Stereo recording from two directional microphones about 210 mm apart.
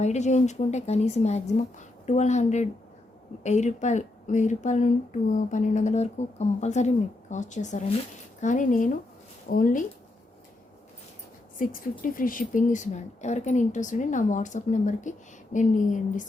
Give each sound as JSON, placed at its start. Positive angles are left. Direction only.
{"t": 0.0, "sound": "a woman's voice", "side_deg": 35}
{"t": 11.6, "sound": "a woman's voice", "side_deg": 40}